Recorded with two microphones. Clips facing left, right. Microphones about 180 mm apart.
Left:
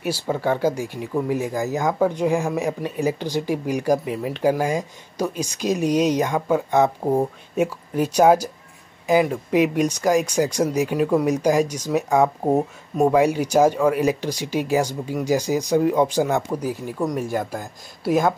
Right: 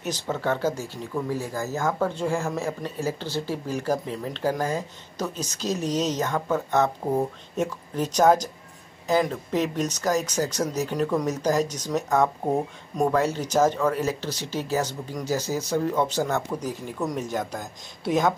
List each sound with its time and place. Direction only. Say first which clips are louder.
0.0 s speech: left 4 dB; 10° left (ahead or behind)